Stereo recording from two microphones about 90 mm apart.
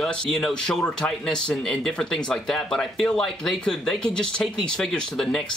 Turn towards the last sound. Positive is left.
turn(degrees=5)  # may be behind; listen again after turning